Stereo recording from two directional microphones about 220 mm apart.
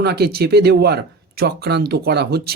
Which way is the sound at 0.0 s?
45° right (ahead or behind).